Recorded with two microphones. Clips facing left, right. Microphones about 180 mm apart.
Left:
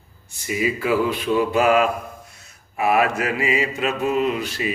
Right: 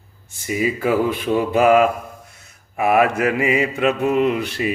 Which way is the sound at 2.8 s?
55° right (ahead or behind).